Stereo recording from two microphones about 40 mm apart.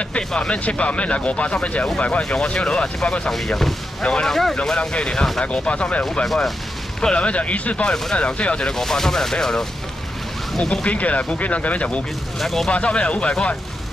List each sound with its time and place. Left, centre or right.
0.4 s speech: left
3.3 s speech: centre
4.0 s speech: centre
4.3 s speech: centre
4.6 s speech: left
6.2 s speech: centre
7.0 s speech: left
7.2 s speech: left
8.7 s speech: centre
10.9 s speech: left
12.4 s speech: centre
12.7 s speech: left